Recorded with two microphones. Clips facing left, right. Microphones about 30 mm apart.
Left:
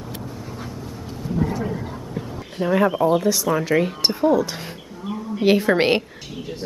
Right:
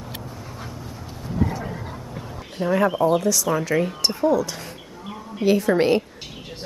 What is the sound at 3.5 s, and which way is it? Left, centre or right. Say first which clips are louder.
Speech: left 2 dB; left.